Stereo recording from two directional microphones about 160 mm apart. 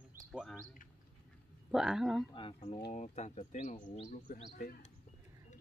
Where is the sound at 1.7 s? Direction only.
5° right (ahead or behind).